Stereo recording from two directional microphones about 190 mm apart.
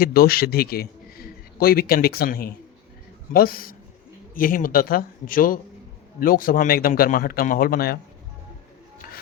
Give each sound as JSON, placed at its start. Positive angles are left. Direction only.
{"t": 0.0, "sound": "a man's voice", "side_deg": 50}